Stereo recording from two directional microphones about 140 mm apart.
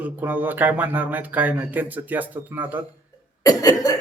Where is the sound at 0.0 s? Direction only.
10° right (ahead or behind).